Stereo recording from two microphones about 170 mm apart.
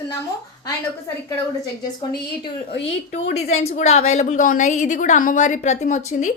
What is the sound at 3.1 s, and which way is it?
A woman's voice, 40° left (ahead or behind).